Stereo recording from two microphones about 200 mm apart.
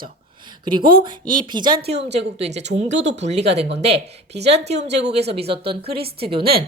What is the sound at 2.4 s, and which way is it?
A woman's voice, 35° right (ahead or behind).